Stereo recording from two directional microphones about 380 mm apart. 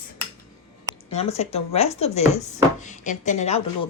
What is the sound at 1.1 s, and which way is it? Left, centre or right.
Speech, centre.